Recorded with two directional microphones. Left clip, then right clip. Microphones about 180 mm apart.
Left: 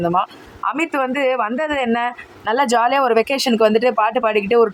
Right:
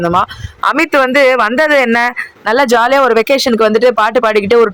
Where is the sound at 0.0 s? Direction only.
25° right (ahead or behind).